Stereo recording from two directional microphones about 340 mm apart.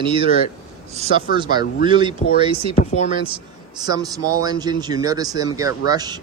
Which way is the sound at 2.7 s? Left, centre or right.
Centre.